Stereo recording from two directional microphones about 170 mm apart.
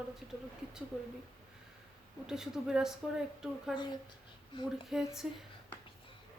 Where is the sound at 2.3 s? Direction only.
5° right (ahead or behind).